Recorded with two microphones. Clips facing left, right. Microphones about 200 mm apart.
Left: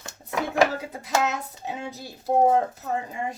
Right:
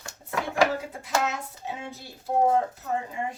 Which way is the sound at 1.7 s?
40° left (ahead or behind).